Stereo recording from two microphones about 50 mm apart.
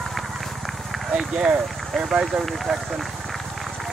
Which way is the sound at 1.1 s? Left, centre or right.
Centre.